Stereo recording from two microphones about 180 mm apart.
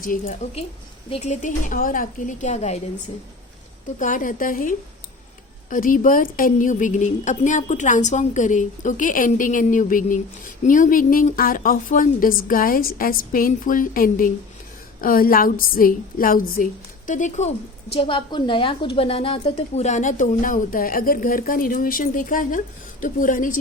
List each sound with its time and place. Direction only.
0.0 s a woman's voice: 50° left (ahead or behind)
1.1 s a woman's voice: 40° left (ahead or behind)
3.9 s a woman's voice: 45° left (ahead or behind)
17.9 s a woman's voice: 30° left (ahead or behind); by 23.6 s 45° left (ahead or behind)